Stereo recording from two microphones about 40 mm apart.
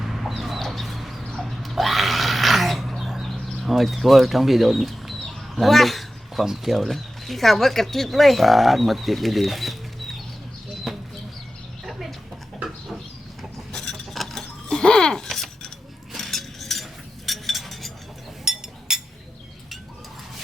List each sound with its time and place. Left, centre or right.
0.0 s chicken: centre
1.3 s a sound: centre
1.6 s a sound: centre
6.4 s speech: centre
6.7 s speech: centre
10.9 s a sound: centre
13.7 s mechanisms: centre
14.1 s chink: centre
14.7 s music: centre
15.3 s cutlery: centre
17.2 s a sound: centre
18.4 s chink: centre